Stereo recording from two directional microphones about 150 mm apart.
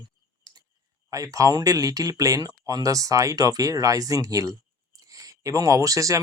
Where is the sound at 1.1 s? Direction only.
20° right (ahead or behind).